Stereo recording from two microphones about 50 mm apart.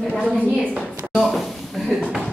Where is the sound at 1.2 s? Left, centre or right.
Centre.